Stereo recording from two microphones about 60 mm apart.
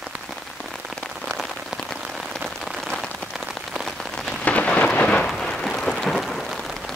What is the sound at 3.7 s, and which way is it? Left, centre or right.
Rain on surface, centre.